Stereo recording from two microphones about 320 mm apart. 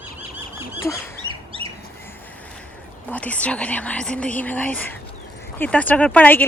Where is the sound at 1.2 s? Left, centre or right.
Centre.